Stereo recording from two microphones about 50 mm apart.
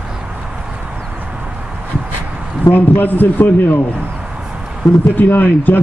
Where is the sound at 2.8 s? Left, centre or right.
Left.